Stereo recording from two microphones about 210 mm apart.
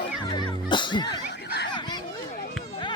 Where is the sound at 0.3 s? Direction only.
20° left (ahead or behind).